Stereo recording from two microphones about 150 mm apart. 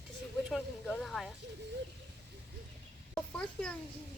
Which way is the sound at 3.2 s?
5° left (ahead or behind).